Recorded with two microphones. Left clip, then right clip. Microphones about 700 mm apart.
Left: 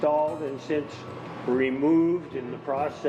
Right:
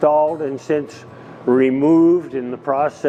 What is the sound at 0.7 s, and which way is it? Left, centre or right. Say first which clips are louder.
Speech: right 8 dB; right.